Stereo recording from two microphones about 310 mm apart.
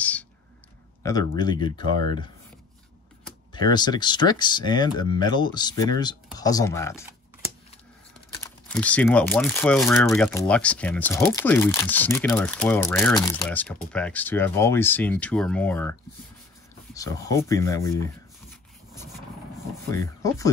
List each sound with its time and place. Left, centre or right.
0.0 s a sound: centre
1.0 s speech: centre
3.5 s speech: centre
8.5 s speech: centre
19.9 s speech: centre